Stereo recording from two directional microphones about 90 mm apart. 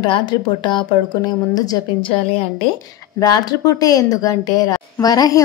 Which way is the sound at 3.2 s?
45° left (ahead or behind).